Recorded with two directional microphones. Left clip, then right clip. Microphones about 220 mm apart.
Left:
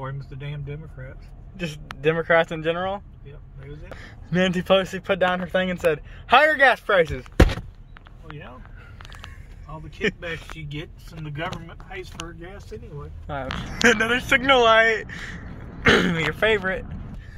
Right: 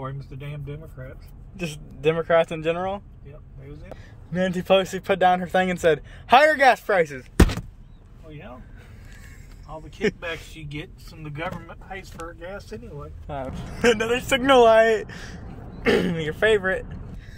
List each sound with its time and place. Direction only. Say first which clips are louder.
0.0 s speech: even; centre (ahead or behind)
2.0 s speech: even; 5° right (ahead or behind)
4.3 s a man's voice: left 3 dB; 15° left (ahead or behind)
4.6 s a man's voice: right 3 dB; 5° right (ahead or behind)
7.0 s a man's voice: left 2 dB; 5° left (ahead or behind)
10.0 s speech: even; 5° right (ahead or behind)
13.3 s speech: left 3 dB; centre (ahead or behind)
14.4 s speech: right 2 dB; 25° right (ahead or behind)
15.8 s speech: left 3 dB; centre (ahead or behind)